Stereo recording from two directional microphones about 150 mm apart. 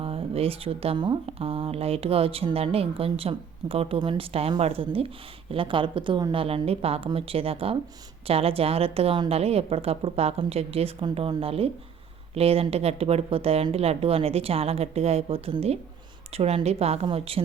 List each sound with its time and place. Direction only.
0.0 s a woman's voice: 40° right (ahead or behind)